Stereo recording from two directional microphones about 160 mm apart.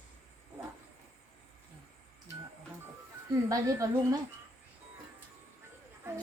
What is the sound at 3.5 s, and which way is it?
Speech, 20° right (ahead or behind).